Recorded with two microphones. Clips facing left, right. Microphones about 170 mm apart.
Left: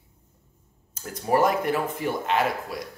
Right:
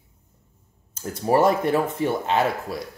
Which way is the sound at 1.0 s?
30° right (ahead or behind).